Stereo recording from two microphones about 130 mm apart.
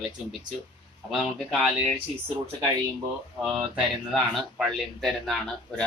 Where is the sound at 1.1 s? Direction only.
Centre (ahead or behind).